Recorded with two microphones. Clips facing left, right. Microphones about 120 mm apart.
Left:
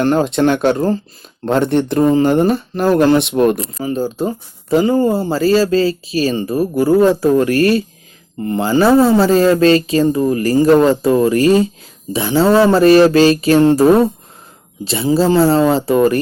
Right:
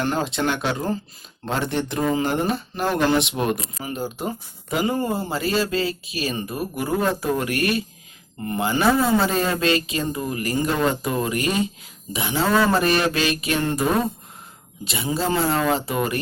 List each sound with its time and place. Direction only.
0.0 s speech: 45° left (ahead or behind)